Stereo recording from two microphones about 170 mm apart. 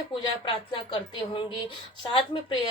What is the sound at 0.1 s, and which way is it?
Speech, 30° left (ahead or behind).